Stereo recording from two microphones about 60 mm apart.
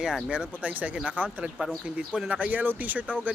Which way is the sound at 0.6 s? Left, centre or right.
Right.